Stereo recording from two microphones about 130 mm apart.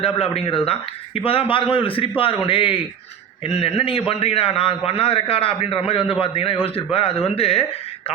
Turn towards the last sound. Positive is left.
turn(degrees=50)  # may be behind; listen again after turning